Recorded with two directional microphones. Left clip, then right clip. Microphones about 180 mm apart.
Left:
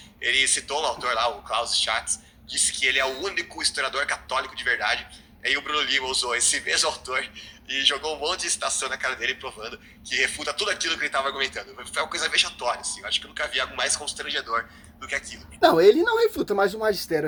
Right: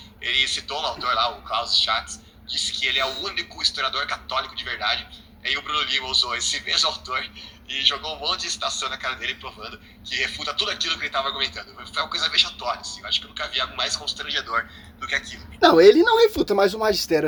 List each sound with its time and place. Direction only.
0.2 s a man's voice: 50° left (ahead or behind)
14.3 s a man's voice: 20° left (ahead or behind)
15.6 s speech: centre (ahead or behind)